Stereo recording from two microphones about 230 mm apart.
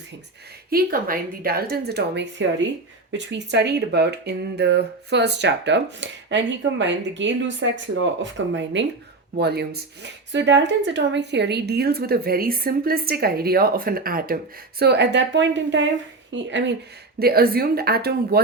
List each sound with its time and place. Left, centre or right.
0.7 s speech: right